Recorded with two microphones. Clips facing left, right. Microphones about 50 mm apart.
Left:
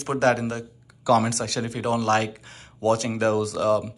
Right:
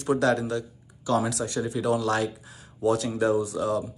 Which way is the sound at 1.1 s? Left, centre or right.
Left.